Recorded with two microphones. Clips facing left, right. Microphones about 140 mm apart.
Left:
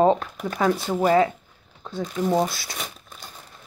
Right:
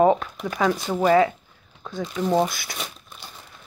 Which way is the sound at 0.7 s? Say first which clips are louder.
Left 1 dB; 5° left (ahead or behind).